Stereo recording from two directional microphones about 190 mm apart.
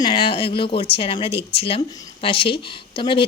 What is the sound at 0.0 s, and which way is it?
Speech, 25° left (ahead or behind).